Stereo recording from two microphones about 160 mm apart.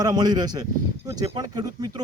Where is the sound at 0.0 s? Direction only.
25° right (ahead or behind).